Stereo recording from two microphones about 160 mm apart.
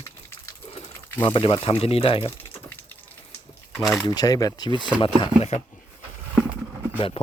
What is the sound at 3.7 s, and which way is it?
Speech, centre (ahead or behind).